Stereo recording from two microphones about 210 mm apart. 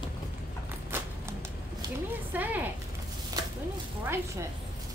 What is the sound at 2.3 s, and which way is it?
Speech, 10° right (ahead or behind).